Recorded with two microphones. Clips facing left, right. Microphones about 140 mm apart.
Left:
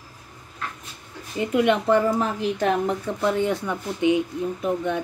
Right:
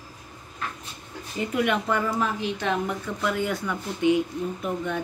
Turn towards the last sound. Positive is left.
turn(degrees=20)  # may be behind; listen again after turning